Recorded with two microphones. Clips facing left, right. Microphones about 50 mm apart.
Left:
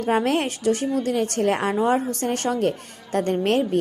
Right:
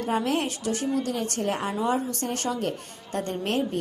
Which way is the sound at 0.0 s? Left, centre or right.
Left.